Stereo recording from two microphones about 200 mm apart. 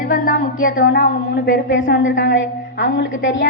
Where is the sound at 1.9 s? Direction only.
70° left (ahead or behind).